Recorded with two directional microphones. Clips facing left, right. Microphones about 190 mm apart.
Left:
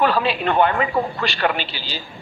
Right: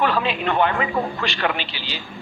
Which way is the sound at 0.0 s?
40° left (ahead or behind).